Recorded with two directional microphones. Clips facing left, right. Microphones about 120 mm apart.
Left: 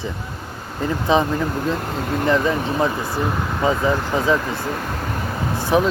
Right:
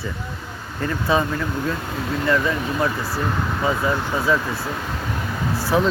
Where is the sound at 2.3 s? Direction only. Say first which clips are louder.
Left 2 dB; 25° left (ahead or behind).